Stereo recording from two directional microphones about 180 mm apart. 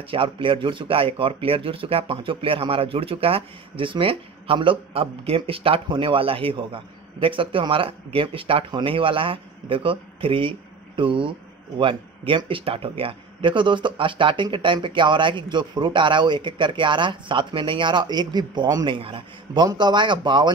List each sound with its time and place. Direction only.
0.1 s speech: 30° right (ahead or behind)